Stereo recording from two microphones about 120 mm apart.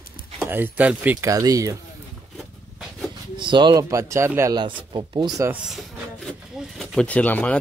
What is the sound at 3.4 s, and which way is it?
Speech, 40° right (ahead or behind).